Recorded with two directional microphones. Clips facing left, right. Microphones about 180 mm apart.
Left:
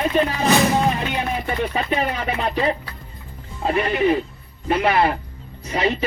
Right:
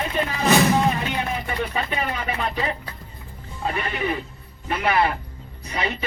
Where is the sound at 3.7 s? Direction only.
35° left (ahead or behind).